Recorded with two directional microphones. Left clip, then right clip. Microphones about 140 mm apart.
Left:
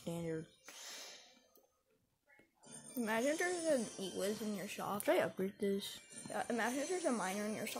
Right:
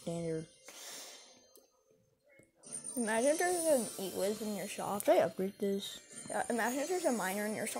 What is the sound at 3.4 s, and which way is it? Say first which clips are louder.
Speech: right 5 dB; 5° right (ahead or behind).